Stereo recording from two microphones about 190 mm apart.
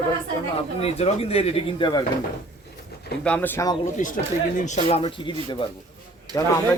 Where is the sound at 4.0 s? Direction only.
40° left (ahead or behind).